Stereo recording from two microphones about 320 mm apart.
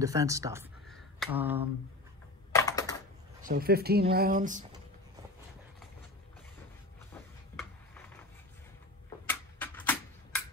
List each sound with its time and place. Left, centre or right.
0.0 s speech: centre
2.5 s computer keyboard: centre
3.4 s speech: right
9.3 s a sound: centre